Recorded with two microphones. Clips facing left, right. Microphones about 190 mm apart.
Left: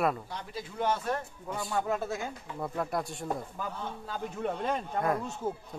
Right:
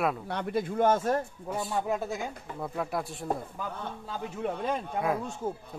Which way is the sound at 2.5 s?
Centre (ahead or behind).